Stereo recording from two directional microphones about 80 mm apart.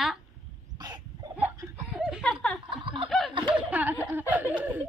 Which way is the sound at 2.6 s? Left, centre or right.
Right.